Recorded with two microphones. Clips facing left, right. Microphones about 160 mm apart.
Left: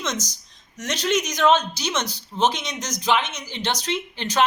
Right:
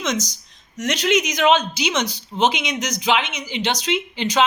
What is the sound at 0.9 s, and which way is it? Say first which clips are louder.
Speech: right 4 dB; 65° right (ahead or behind).